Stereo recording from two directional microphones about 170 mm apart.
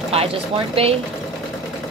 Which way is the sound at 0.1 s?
35° right (ahead or behind).